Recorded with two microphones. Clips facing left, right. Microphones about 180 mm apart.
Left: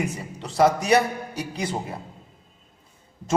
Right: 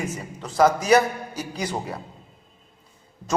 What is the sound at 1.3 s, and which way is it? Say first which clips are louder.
Speech: left 1 dB; 60° left (ahead or behind).